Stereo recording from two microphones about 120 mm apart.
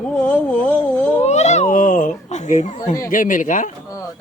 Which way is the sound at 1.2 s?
70° left (ahead or behind).